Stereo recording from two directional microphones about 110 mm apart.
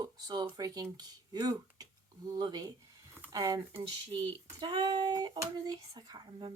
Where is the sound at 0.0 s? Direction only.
40° right (ahead or behind).